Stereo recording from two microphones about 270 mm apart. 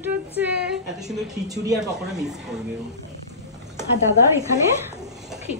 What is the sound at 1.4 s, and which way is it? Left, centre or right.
Speech, centre.